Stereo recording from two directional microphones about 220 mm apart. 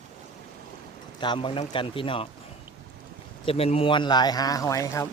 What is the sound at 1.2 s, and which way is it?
Speech, 20° left (ahead or behind).